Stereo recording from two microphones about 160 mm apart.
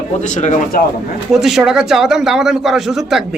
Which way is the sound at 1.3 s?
Centre (ahead or behind).